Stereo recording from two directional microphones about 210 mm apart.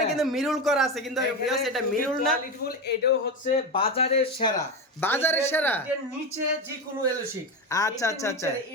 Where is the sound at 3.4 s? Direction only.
30° left (ahead or behind).